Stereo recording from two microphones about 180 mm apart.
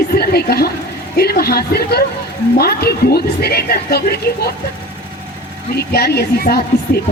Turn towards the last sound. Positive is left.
turn(degrees=60)  # may be behind; listen again after turning